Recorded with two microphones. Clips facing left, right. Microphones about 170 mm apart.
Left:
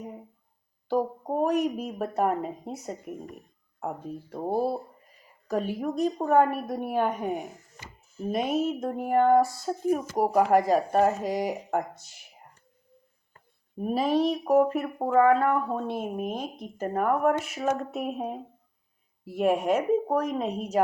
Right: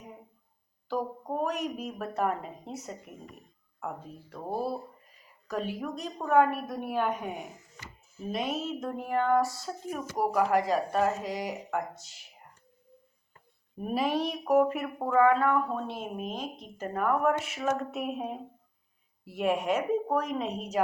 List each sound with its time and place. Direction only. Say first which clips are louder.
0.9 s speech: left 5 dB; 45° left (ahead or behind)
2.0 s speech: left 4 dB; 40° left (ahead or behind)
5.5 s speech: left 5 dB; 45° left (ahead or behind)
6.1 s speech: left 1 dB; 35° left (ahead or behind); by 12.2 s 50° left (ahead or behind)
13.7 s speech: left 4 dB; 35° left (ahead or behind)